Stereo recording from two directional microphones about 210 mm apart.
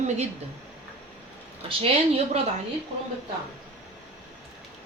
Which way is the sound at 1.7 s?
25° right (ahead or behind).